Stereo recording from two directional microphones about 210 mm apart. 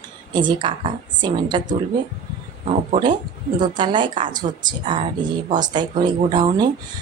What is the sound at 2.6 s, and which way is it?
Speech, 30° right (ahead or behind).